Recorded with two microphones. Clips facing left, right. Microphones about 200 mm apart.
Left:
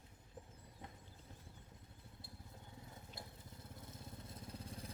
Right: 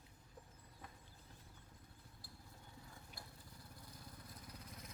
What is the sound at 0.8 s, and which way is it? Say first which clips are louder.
Horse: left 3 dB; 20° left (ahead or behind).